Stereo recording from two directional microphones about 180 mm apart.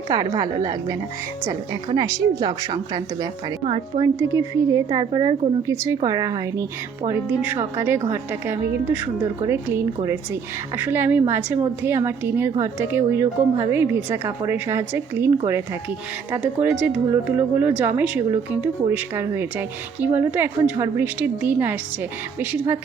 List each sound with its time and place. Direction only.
0.1 s a woman's voice: 20° right (ahead or behind)
4.2 s a woman's voice: 15° right (ahead or behind)
16.3 s a woman's voice: 10° right (ahead or behind)